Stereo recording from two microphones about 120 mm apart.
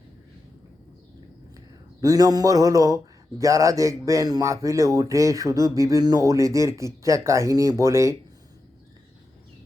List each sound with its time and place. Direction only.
1.5 s speech: 30° right (ahead or behind)